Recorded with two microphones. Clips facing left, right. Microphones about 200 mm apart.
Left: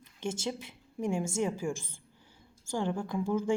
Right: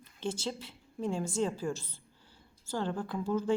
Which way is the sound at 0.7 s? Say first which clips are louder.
Left 3 dB; 10° left (ahead or behind).